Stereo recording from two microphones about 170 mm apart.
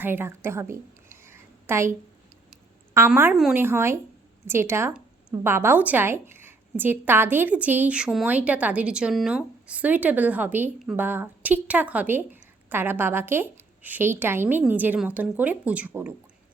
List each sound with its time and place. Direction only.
0.0 s a woman's voice: 15° right (ahead or behind)
3.3 s a woman's voice: centre (ahead or behind)
3.6 s a woman's voice: 15° right (ahead or behind)